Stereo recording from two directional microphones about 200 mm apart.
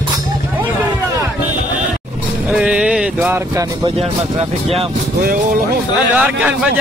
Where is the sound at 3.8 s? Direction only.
30° right (ahead or behind).